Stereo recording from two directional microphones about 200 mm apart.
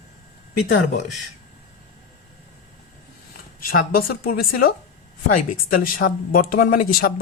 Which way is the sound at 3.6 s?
45° left (ahead or behind).